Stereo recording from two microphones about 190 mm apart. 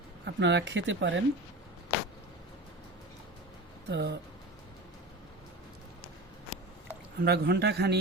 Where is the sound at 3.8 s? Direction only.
60° right (ahead or behind).